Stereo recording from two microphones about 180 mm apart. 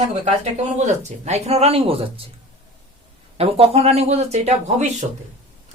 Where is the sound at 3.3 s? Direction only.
35° right (ahead or behind).